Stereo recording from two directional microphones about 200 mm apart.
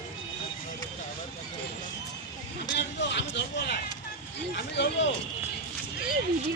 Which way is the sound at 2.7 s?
60° left (ahead or behind).